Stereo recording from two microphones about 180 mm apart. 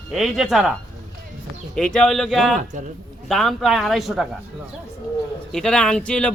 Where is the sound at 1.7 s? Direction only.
5° left (ahead or behind).